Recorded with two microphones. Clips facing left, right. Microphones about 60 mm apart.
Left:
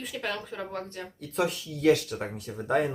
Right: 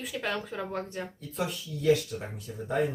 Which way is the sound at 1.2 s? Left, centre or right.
Left.